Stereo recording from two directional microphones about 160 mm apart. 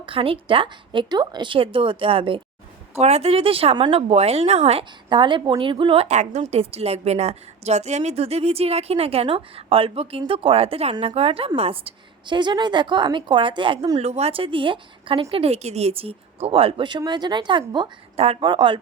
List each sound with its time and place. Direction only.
0.0 s a woman's voice: 35° right (ahead or behind)
14.0 s a woman's voice: 40° right (ahead or behind)